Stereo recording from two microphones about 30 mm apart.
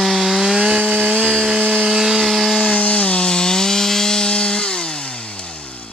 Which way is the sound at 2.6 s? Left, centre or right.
Left.